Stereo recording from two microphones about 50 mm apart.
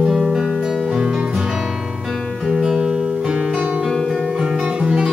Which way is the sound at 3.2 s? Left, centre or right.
Right.